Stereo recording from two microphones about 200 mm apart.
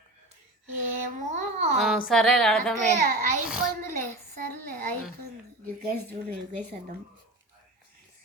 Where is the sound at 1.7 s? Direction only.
Centre (ahead or behind).